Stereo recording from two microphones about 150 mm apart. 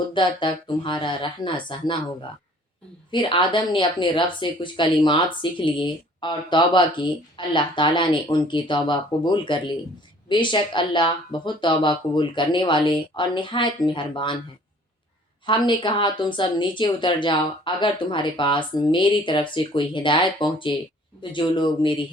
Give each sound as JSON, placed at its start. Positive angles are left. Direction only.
{"t": 0.1, "sound": "speech", "side_deg": 30}
{"t": 3.1, "sound": "speech", "side_deg": 35}
{"t": 15.4, "sound": "speech", "side_deg": 30}